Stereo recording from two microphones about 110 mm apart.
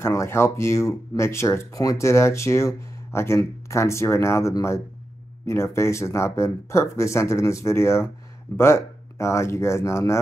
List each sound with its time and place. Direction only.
0.0 s speech: 25° left (ahead or behind)